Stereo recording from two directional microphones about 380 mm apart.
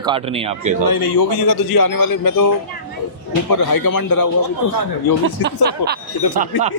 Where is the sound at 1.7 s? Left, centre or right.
Left.